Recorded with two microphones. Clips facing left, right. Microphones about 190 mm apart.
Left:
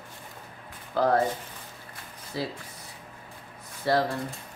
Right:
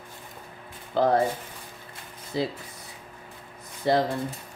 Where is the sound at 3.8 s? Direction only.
20° right (ahead or behind).